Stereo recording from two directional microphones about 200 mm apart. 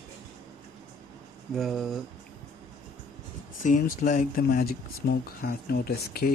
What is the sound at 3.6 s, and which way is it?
Speech, 40° left (ahead or behind).